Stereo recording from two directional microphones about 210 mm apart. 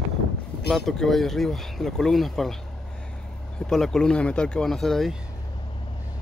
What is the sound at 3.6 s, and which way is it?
Speech, centre (ahead or behind).